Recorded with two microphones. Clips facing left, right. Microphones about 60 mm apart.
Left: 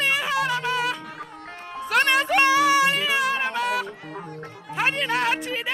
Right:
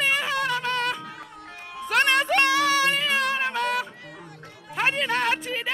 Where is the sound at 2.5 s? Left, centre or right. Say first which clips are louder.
Left 3 dB; centre.